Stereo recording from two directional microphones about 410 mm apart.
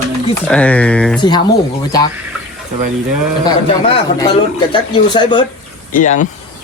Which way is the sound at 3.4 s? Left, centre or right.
Centre.